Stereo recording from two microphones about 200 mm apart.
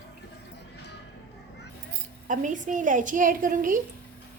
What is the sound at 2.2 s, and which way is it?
A woman's voice, 40° right (ahead or behind).